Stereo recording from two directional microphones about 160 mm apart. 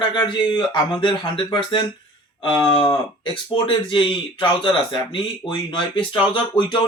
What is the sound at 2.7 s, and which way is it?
Speech, 35° left (ahead or behind).